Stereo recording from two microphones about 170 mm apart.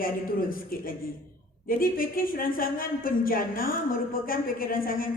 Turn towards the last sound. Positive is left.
turn(degrees=55)  # may be behind; listen again after turning